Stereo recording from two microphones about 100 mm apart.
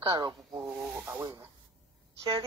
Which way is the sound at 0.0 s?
40° right (ahead or behind).